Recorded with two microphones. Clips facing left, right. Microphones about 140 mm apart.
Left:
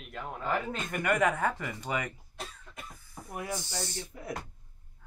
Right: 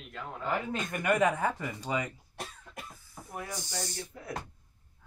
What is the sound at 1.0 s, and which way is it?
Speech, 15° right (ahead or behind).